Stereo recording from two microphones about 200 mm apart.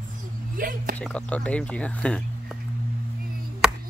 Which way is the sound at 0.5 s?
45° right (ahead or behind).